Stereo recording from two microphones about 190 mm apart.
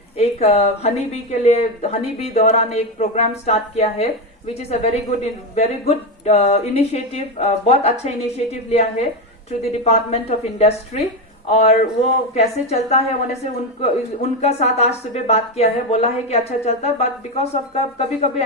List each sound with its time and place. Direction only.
0.2 s a woman's voice: 35° left (ahead or behind)